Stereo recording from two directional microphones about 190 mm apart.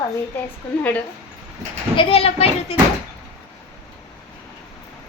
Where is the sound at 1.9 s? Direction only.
30° left (ahead or behind).